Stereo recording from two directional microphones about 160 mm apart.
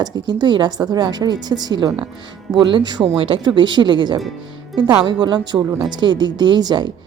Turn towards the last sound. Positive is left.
turn(degrees=-25)  # may be behind; listen again after turning